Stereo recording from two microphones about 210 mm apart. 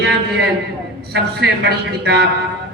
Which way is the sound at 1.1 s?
50° right (ahead or behind).